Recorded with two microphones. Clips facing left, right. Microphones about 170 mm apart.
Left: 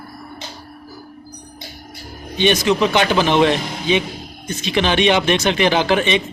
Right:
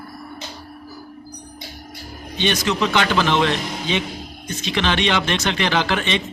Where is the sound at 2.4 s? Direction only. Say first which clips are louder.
Left 5 dB; 15° left (ahead or behind).